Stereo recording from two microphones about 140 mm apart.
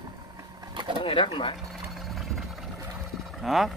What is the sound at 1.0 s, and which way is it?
Pigeon, 40° left (ahead or behind).